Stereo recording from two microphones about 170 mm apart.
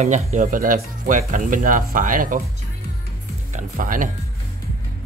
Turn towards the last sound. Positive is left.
turn(degrees=-55)  # may be behind; listen again after turning